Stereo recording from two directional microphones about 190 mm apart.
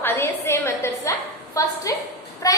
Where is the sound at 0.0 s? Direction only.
15° left (ahead or behind).